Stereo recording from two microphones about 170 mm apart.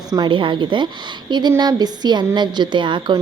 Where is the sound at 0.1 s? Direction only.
25° right (ahead or behind).